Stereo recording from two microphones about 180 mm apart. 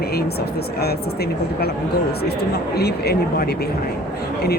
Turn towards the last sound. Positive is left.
turn(degrees=60)  # may be behind; listen again after turning